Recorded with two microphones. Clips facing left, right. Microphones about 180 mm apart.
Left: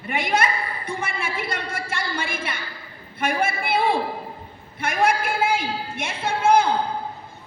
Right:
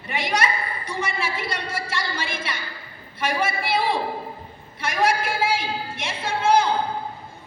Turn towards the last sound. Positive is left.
turn(degrees=55)  # may be behind; listen again after turning